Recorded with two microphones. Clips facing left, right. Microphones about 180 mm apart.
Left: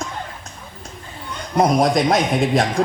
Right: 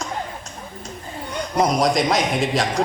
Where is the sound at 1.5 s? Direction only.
55° left (ahead or behind).